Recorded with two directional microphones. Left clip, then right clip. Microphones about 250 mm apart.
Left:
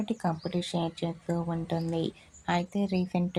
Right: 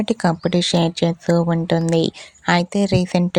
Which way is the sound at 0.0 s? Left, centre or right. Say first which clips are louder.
Right 12 dB; right.